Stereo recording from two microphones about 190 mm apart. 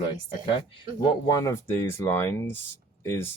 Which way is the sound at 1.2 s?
20° left (ahead or behind).